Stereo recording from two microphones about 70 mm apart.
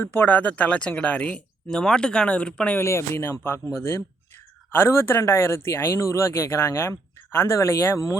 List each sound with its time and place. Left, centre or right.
0.0 s speech: left
1.7 s speech: centre
2.7 s speech: left
4.7 s speech: left